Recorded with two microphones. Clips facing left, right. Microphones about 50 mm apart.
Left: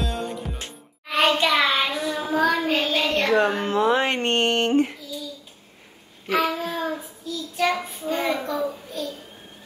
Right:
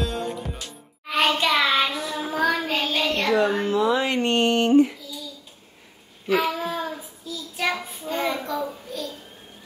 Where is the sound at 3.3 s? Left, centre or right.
Left.